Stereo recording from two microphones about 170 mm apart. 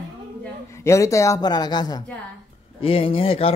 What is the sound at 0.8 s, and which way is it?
A man's voice, 15° left (ahead or behind).